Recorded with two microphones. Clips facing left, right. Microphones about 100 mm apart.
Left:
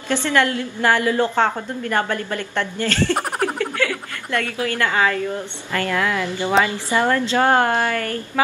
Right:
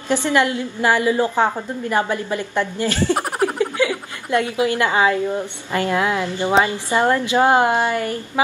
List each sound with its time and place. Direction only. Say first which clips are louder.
0.1 s a woman's voice: right 1 dB; 15° right (ahead or behind)
3.2 s speech: right 2 dB; 5° right (ahead or behind)
3.5 s a woman's voice: right 3 dB; 15° right (ahead or behind)